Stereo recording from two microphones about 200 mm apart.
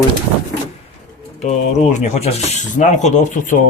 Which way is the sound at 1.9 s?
35° left (ahead or behind).